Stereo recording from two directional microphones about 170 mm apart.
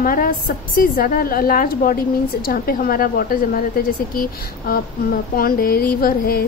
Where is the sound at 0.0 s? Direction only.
55° left (ahead or behind).